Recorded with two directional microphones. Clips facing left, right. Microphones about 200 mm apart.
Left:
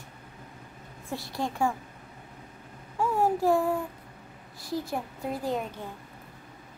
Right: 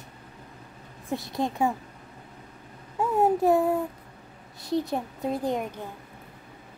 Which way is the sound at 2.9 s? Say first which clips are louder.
Right 3 dB; 20° right (ahead or behind).